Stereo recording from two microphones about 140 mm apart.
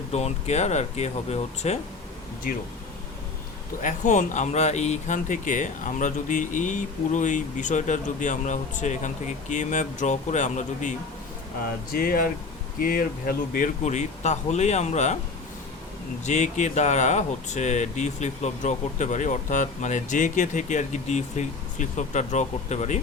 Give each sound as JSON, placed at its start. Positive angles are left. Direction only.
{"t": 0.1, "sound": "speech", "side_deg": 50}
{"t": 3.8, "sound": "speech", "side_deg": 65}
{"t": 11.9, "sound": "speech", "side_deg": 90}
{"t": 16.2, "sound": "speech", "side_deg": 55}